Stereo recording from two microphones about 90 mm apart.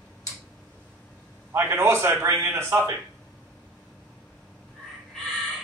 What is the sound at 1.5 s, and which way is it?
A man's voice, 30° right (ahead or behind).